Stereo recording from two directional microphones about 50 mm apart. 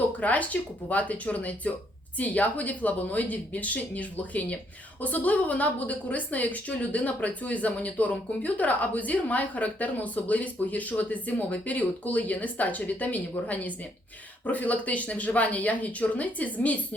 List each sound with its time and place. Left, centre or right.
0.2 s a woman's voice: left